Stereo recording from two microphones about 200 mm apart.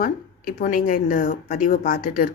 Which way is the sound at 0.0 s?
45° left (ahead or behind).